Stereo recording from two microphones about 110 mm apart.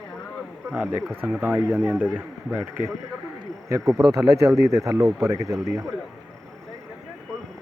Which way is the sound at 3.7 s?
30° right (ahead or behind).